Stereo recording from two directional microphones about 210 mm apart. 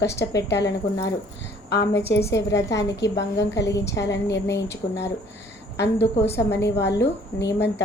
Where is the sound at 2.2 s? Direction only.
15° left (ahead or behind).